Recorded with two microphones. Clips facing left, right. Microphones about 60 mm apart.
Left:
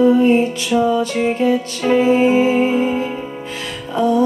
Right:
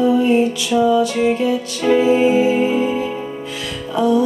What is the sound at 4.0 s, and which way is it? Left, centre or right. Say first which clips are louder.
Music: even; left.